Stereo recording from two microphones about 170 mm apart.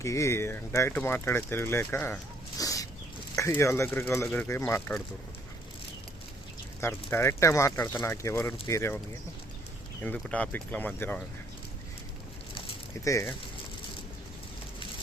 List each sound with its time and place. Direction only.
0.0 s speech: 15° left (ahead or behind)
6.8 s speech: 15° left (ahead or behind)
10.0 s speech: 10° left (ahead or behind)